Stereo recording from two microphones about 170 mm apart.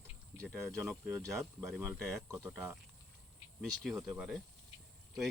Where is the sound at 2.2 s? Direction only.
15° right (ahead or behind).